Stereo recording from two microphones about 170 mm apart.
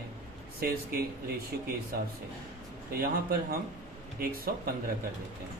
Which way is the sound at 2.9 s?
65° right (ahead or behind).